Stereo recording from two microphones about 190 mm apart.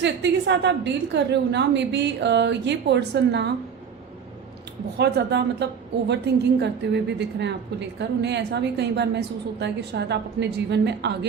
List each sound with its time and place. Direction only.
0.0 s a woman's voice: 65° right (ahead or behind)
4.9 s a woman's voice: 60° right (ahead or behind)